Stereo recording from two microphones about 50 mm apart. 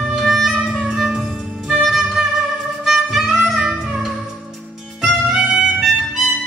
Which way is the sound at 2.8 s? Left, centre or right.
Centre.